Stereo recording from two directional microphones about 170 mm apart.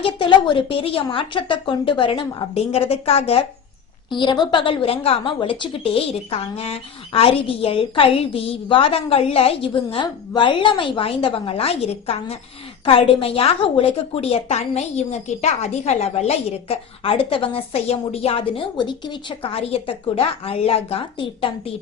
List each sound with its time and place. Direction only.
0.0 s a woman's voice: 30° left (ahead or behind)